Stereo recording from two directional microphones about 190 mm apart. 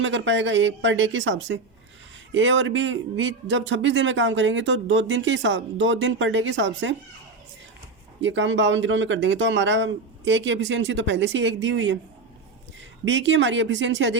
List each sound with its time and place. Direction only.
0.0 s a man's voice: 75° right (ahead or behind)
8.2 s a man's voice: 75° right (ahead or behind)
13.1 s a man's voice: 75° right (ahead or behind)